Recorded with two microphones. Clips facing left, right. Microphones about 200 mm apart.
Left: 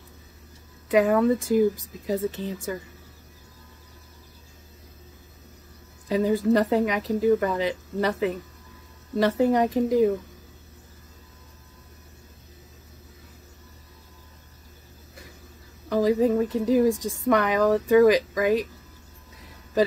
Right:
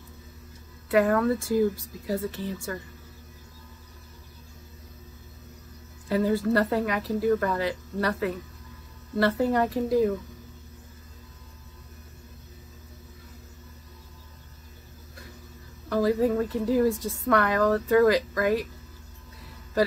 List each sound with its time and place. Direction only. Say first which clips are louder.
0.8 s a woman's voice: left 2 dB; 15° left (ahead or behind)
6.0 s a woman's voice: left 2 dB; 15° left (ahead or behind)
15.9 s a woman's voice: left 2 dB; 15° left (ahead or behind)